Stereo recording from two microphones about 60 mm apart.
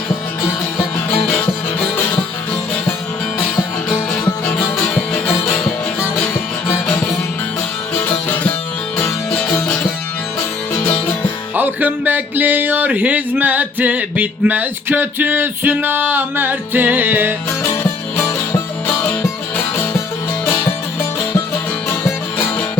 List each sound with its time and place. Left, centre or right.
6.9 s music: left
10.7 s music: left
11.5 s music: right
12.9 s a sound: right
21.8 s music: left